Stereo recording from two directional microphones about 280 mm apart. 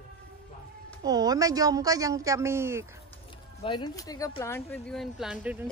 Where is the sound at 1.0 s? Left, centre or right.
Centre.